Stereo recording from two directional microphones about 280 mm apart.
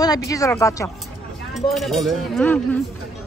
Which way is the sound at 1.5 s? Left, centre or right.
Centre.